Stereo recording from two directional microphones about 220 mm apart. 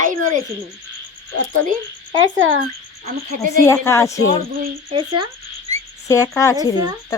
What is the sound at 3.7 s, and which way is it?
Speech, 10° left (ahead or behind).